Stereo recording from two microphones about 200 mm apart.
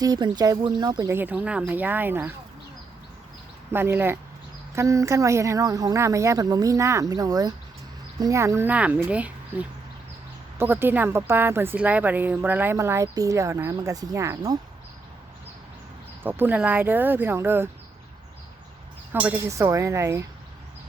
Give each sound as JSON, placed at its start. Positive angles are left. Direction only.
{"t": 0.0, "sound": "a woman's voice", "side_deg": -20}
{"t": 3.7, "sound": "a woman's voice", "side_deg": -10}
{"t": 16.2, "sound": "a woman's voice", "side_deg": -10}
{"t": 19.2, "sound": "a woman's voice", "side_deg": -10}